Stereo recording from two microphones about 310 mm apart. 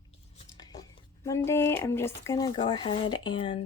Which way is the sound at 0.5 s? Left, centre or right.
Centre.